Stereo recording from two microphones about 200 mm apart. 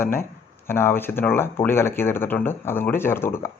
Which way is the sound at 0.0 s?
10° left (ahead or behind).